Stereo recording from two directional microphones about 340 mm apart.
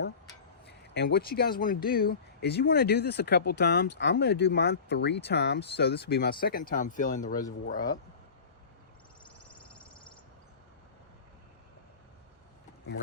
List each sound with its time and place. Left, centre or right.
0.6 s speech: left